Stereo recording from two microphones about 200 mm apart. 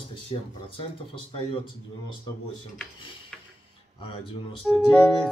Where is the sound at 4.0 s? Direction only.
25° left (ahead or behind).